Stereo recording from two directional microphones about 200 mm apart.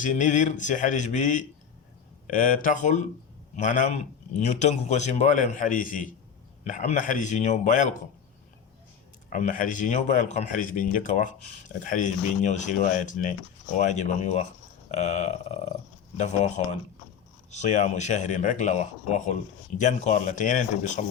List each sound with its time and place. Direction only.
0.0 s speech: 40° left (ahead or behind)
9.3 s speech: 40° left (ahead or behind)
17.5 s speech: 35° left (ahead or behind)